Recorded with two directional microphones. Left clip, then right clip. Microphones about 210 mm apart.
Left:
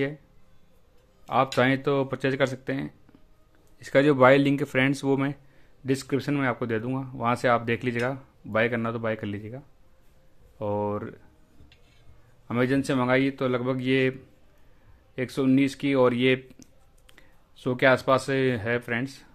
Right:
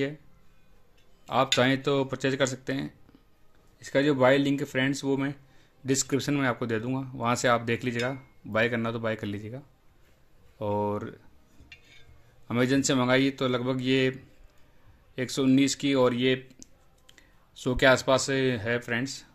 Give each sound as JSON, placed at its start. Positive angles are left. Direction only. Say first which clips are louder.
{"t": 1.2, "sound": "speech", "louder": "left 1 dB", "side_deg": 0}
{"t": 3.8, "sound": "speech", "louder": "left 4 dB", "side_deg": 15}
{"t": 12.4, "sound": "speech", "louder": "even", "side_deg": 0}
{"t": 15.1, "sound": "speech", "louder": "left 1 dB", "side_deg": 5}
{"t": 17.6, "sound": "speech", "louder": "even", "side_deg": 0}